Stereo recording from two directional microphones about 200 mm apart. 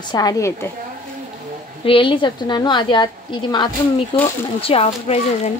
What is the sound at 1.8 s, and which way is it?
Speech, 25° left (ahead or behind).